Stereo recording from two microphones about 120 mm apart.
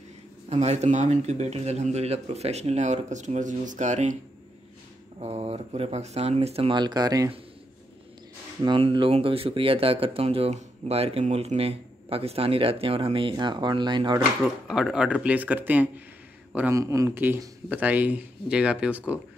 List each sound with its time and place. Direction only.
0.5 s a man's voice: 65° right (ahead or behind); by 4.2 s 85° right
5.2 s speech: 60° right (ahead or behind)
6.7 s speech: 35° right (ahead or behind)
8.6 s speech: 45° right (ahead or behind)
14.7 s speech: 5° right (ahead or behind)
16.7 s speech: 25° right (ahead or behind)